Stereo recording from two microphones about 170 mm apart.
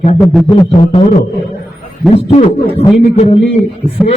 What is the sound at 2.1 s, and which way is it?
A man's voice, 40° left (ahead or behind).